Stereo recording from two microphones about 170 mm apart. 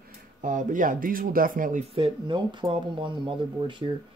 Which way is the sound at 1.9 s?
30° right (ahead or behind).